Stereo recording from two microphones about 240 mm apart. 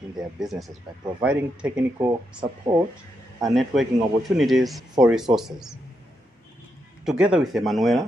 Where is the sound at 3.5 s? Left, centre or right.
Centre.